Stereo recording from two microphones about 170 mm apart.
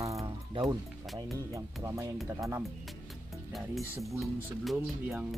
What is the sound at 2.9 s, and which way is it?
Music, centre (ahead or behind).